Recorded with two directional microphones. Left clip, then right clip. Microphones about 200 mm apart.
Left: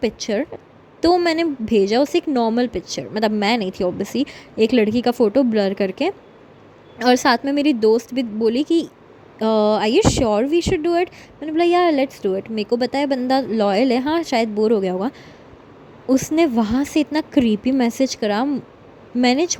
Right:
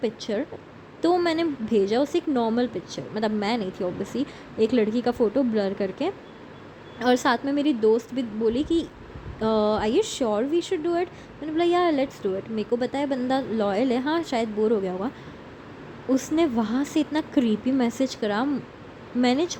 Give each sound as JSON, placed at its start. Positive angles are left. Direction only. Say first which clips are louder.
{"t": 0.0, "sound": "speech", "louder": "left 6 dB", "side_deg": 40}